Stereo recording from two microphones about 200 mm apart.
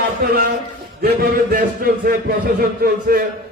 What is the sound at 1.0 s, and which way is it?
Music, 45° right (ahead or behind).